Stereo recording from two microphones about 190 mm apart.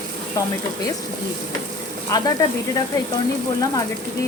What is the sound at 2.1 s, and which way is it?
Speech, 15° left (ahead or behind).